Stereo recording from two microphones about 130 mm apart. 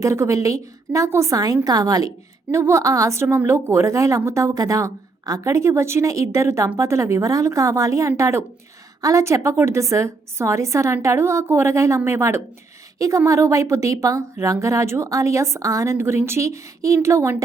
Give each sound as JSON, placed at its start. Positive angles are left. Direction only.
{"t": 0.0, "sound": "speech", "side_deg": -25}